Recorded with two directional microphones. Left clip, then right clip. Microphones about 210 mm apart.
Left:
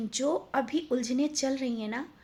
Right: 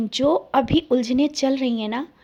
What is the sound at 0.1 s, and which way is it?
Speech, 30° right (ahead or behind).